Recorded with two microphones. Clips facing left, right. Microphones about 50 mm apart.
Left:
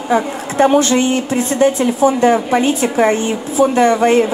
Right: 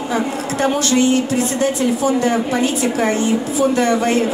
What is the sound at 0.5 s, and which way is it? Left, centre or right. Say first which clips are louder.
A woman's voice: left 6 dB; left.